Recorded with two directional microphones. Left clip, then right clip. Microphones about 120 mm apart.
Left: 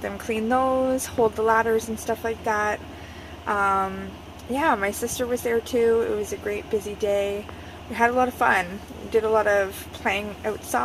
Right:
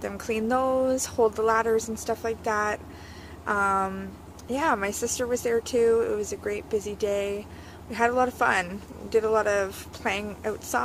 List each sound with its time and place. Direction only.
0.0 s speech: 30° right (ahead or behind)